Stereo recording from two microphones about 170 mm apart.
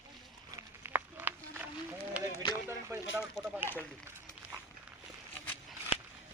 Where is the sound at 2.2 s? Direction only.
5° right (ahead or behind).